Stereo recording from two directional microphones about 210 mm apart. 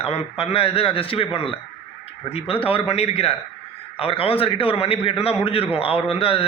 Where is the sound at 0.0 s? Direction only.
30° left (ahead or behind).